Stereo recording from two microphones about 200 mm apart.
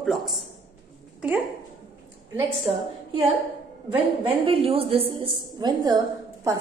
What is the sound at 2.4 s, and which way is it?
A woman's voice, 30° right (ahead or behind).